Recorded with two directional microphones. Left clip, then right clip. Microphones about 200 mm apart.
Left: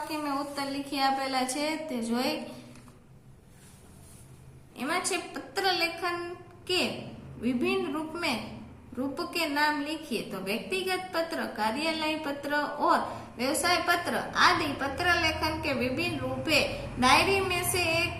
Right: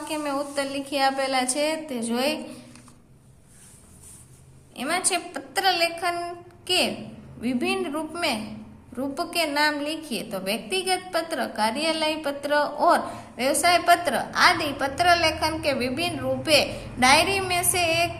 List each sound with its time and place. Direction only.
0.1 s a woman's voice: 45° right (ahead or behind)
4.7 s a woman's voice: 45° right (ahead or behind)
7.4 s a woman's voice: 45° right (ahead or behind)